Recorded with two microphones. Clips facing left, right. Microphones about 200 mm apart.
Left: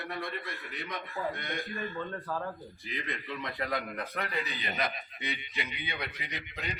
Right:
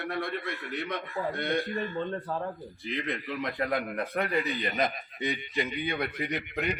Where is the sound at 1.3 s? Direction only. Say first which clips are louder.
Right 9 dB; 70° right (ahead or behind).